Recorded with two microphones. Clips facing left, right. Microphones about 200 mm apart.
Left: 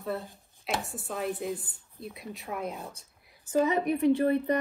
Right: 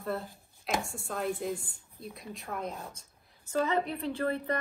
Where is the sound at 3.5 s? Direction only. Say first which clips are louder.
Left 4 dB; 15° left (ahead or behind).